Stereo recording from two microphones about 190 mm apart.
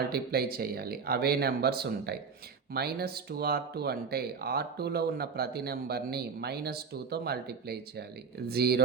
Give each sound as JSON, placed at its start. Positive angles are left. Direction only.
{"t": 0.1, "sound": "speech", "side_deg": -55}